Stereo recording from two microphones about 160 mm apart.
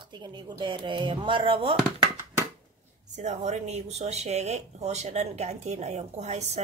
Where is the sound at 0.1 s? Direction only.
30° right (ahead or behind).